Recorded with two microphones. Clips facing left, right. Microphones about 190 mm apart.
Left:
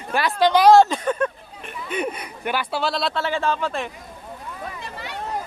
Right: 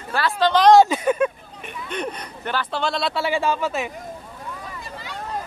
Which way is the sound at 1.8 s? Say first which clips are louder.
Left 2 dB; 5° left (ahead or behind).